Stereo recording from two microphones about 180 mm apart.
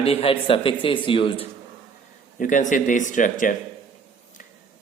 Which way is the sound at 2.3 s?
45° left (ahead or behind).